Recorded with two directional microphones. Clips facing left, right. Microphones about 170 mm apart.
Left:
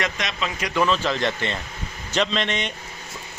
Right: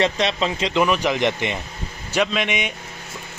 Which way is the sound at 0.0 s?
30° right (ahead or behind).